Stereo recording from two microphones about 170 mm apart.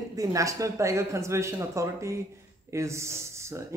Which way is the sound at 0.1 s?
20° right (ahead or behind).